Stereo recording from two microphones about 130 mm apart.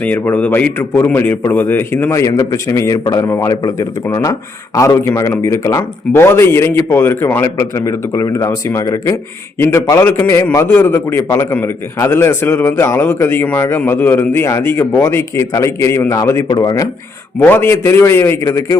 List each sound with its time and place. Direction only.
0.0 s a man's voice: 15° left (ahead or behind); by 16.9 s 30° left (ahead or behind)
17.4 s a man's voice: 15° left (ahead or behind)